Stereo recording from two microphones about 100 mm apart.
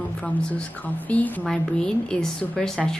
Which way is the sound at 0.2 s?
15° left (ahead or behind).